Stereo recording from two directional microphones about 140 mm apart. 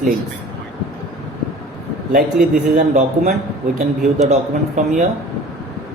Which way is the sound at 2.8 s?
55° right (ahead or behind).